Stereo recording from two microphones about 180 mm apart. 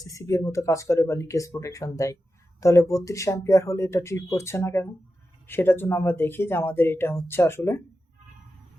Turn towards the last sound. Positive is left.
turn(degrees=15)  # may be behind; listen again after turning